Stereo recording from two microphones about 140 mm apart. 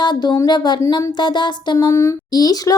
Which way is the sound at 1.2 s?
30° left (ahead or behind).